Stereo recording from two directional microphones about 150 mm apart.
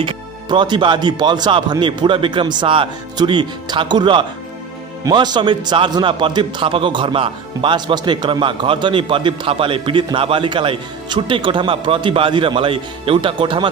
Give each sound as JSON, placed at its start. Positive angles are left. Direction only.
{"t": 0.0, "sound": "a man's voice", "side_deg": -30}